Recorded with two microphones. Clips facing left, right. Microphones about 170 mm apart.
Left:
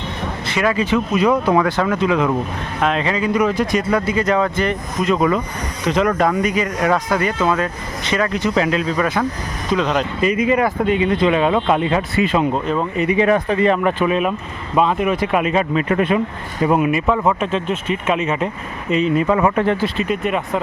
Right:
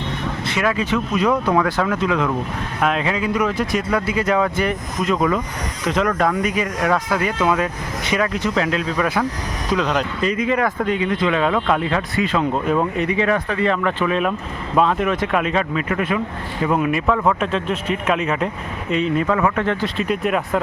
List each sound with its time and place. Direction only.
0.4 s speech: centre (ahead or behind)
11.0 s speech: 20° left (ahead or behind)
12.6 s speech: 5° right (ahead or behind)
13.1 s speech: 20° left (ahead or behind)
15.7 s speech: 30° left (ahead or behind)
16.7 s speech: 5° left (ahead or behind)
19.3 s speech: 15° left (ahead or behind)
19.7 s speech: centre (ahead or behind)